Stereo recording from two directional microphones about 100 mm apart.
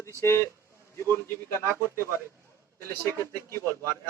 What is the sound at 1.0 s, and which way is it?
A man's voice, 25° left (ahead or behind).